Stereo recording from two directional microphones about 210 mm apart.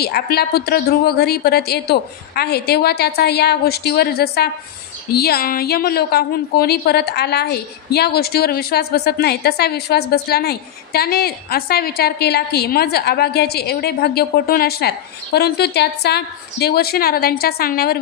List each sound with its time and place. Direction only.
0.0 s a woman's voice: 50° left (ahead or behind)